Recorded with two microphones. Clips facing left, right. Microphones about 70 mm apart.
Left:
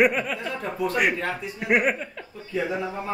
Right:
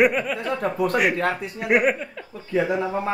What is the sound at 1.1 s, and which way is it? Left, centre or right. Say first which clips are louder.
Speech: right 5 dB; right.